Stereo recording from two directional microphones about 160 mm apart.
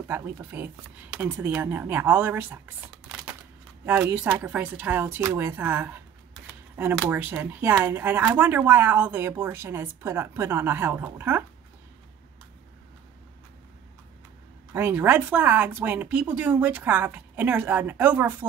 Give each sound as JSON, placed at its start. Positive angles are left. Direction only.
{"t": 0.1, "sound": "speech", "side_deg": -10}
{"t": 7.1, "sound": "speech", "side_deg": -10}
{"t": 14.7, "sound": "speech", "side_deg": -15}